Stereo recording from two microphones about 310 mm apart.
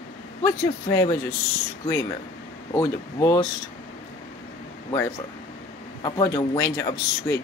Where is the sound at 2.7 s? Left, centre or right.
Centre.